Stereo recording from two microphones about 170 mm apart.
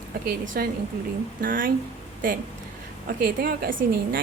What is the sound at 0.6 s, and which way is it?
A woman's voice, 60° right (ahead or behind).